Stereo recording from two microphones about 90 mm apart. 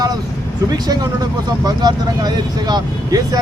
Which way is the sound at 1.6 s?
50° right (ahead or behind).